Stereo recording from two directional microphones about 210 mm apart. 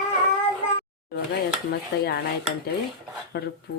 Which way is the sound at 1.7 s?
50° left (ahead or behind).